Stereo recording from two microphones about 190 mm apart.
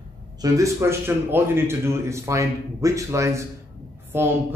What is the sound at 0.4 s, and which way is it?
A man's voice, 15° right (ahead or behind).